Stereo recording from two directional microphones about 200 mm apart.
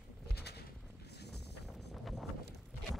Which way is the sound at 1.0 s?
55° left (ahead or behind).